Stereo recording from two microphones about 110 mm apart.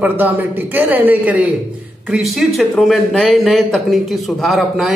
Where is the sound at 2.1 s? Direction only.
Centre (ahead or behind).